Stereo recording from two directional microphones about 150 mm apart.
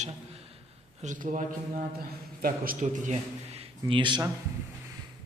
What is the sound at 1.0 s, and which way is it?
A man's voice, 60° right (ahead or behind).